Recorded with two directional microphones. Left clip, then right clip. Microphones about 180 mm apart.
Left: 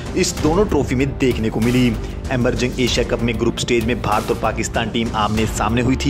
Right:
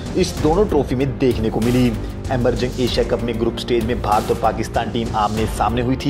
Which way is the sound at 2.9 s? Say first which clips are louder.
Even; 50° left (ahead or behind).